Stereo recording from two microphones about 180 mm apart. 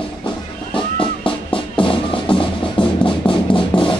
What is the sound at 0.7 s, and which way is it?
Music, 30° left (ahead or behind).